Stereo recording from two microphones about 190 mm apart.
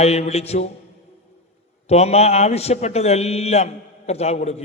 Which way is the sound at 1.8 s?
35° left (ahead or behind).